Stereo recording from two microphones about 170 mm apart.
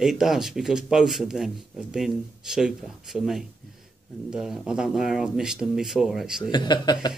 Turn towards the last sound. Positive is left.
turn(degrees=25)  # may be behind; listen again after turning